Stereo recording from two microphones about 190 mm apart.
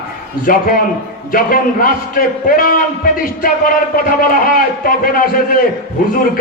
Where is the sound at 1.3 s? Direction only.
50° left (ahead or behind).